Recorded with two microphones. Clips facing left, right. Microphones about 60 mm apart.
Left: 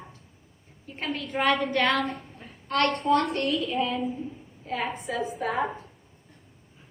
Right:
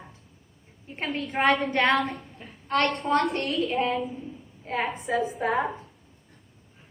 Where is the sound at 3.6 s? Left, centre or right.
Right.